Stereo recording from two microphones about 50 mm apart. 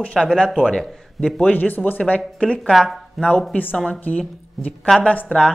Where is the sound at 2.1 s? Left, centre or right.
Left.